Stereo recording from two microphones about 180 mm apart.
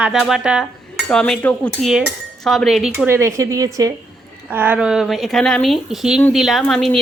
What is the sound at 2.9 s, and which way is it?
Speech, 15° right (ahead or behind).